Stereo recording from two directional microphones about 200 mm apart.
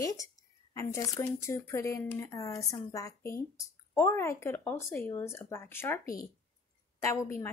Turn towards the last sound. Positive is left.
turn(degrees=15)  # may be behind; listen again after turning